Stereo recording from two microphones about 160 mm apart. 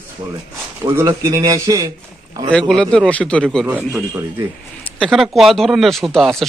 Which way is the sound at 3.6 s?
10° right (ahead or behind).